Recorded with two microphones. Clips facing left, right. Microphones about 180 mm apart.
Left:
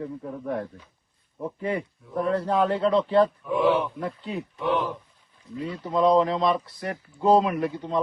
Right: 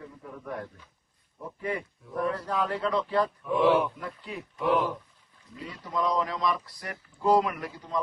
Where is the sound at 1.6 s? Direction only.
25° left (ahead or behind).